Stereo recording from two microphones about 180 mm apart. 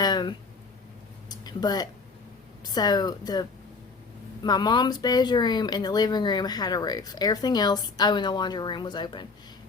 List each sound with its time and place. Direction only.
0.0 s a sound: 25° left (ahead or behind)
2.7 s speech: 20° left (ahead or behind)
4.4 s speech: 25° left (ahead or behind)